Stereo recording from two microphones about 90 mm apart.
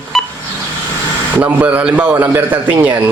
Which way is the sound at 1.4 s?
15° right (ahead or behind).